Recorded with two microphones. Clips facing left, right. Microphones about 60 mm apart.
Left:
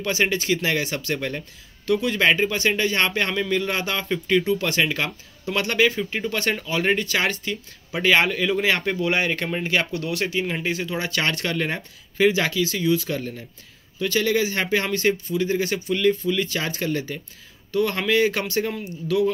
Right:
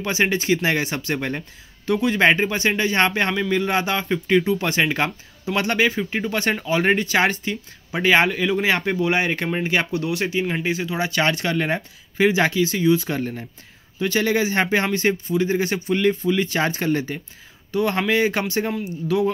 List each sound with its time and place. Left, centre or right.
0.3 s speech: right
13.1 s speech: right